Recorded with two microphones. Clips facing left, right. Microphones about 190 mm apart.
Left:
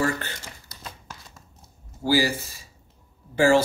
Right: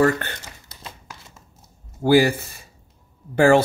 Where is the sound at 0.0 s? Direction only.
60° right (ahead or behind).